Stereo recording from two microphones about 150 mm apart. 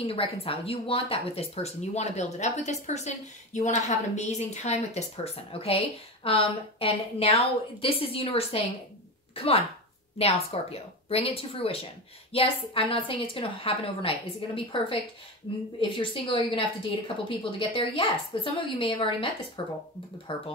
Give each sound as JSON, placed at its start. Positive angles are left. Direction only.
{"t": 0.0, "sound": "a woman's voice", "side_deg": 40}